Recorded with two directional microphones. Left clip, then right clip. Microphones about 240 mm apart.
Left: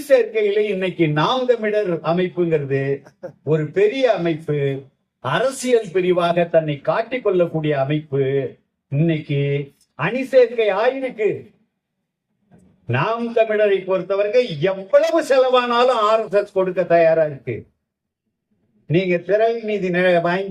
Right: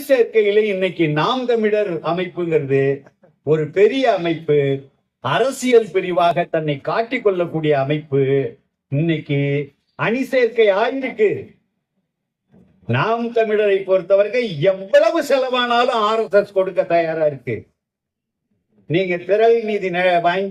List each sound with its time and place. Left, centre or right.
0.1 s a man's voice: right
12.9 s a man's voice: right
18.9 s a man's voice: right